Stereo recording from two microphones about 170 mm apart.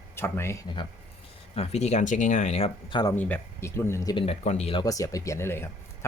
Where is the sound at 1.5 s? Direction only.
40° left (ahead or behind).